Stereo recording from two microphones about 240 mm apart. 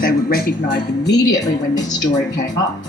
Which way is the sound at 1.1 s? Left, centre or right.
Centre.